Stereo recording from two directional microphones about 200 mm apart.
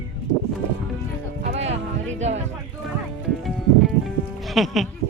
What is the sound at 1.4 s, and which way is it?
Music, 35° right (ahead or behind).